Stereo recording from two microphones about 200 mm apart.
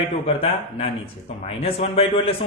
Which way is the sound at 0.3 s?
30° left (ahead or behind).